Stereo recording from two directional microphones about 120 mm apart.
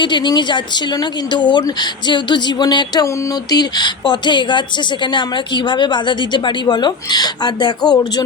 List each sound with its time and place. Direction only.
0.0 s a woman's voice: 40° left (ahead or behind)